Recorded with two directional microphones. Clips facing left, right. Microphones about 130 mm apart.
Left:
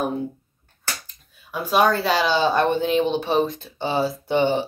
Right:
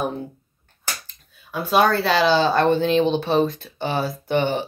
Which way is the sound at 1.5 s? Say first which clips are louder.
Right 1 dB; 10° left (ahead or behind).